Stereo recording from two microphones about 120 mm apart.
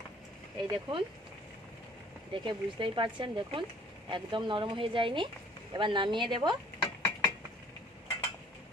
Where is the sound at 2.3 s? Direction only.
40° right (ahead or behind).